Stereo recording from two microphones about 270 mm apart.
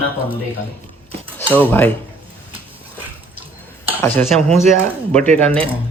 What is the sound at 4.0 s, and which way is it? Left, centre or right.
Speech, centre.